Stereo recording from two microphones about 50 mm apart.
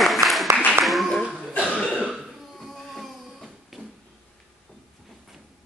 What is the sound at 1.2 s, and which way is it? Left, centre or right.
Cough, centre.